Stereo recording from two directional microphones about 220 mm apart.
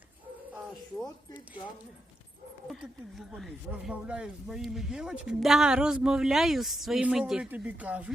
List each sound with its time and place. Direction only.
1.0 s speech: 20° left (ahead or behind)
2.6 s speech: centre (ahead or behind)